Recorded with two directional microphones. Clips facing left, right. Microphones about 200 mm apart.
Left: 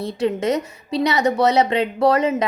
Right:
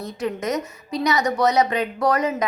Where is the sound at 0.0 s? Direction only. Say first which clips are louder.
Left 5 dB; 30° left (ahead or behind).